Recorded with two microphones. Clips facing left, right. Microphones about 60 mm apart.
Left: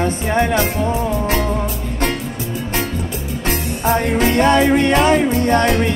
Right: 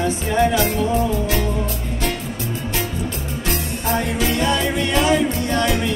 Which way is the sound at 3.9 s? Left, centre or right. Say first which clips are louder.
Left 5 dB; left.